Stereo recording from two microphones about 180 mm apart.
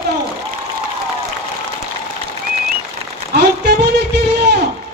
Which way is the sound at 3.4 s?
70° right (ahead or behind).